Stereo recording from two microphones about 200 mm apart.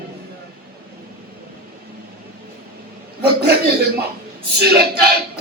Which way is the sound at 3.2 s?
50° right (ahead or behind).